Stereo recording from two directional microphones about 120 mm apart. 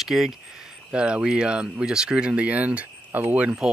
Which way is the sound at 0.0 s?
Centre (ahead or behind).